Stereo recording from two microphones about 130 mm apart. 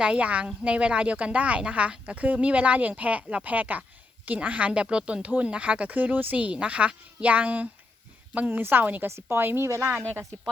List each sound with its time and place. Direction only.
0.0 s speech: 10° right (ahead or behind)